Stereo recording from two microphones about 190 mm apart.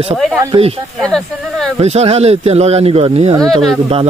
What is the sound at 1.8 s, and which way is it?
A man's voice, 35° right (ahead or behind).